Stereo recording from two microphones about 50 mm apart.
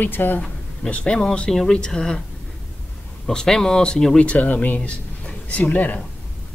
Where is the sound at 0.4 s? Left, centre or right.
Left.